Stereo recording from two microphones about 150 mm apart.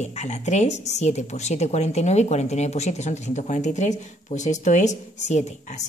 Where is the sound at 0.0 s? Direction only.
50° left (ahead or behind).